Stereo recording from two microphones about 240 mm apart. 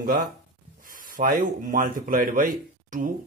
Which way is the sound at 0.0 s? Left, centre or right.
Right.